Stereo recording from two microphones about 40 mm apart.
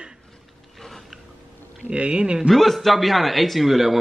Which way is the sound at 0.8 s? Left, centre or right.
Centre.